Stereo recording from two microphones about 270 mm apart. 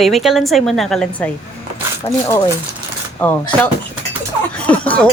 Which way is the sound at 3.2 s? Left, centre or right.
Centre.